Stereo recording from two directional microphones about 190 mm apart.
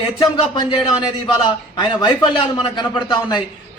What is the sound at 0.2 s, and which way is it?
A man's voice, 25° left (ahead or behind).